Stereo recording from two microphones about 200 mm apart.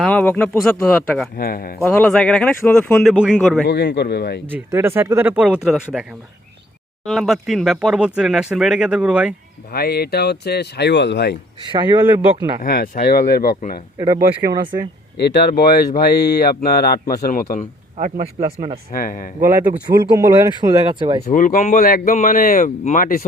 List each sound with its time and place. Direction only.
0.0 s speech: 5° left (ahead or behind)
1.4 s speech: 45° left (ahead or behind)
1.8 s speech: 5° left (ahead or behind)
3.7 s speech: 60° left (ahead or behind)
4.5 s speech: 15° right (ahead or behind)
9.7 s speech: 50° left (ahead or behind)
11.6 s speech: 25° right (ahead or behind)
12.6 s speech: 50° left (ahead or behind)
14.4 s speech: 20° right (ahead or behind)
15.2 s speech: 55° left (ahead or behind)
17.9 s speech: 30° right (ahead or behind)
18.9 s speech: 45° left (ahead or behind)
19.5 s speech: 15° right (ahead or behind)
21.2 s speech: 40° left (ahead or behind)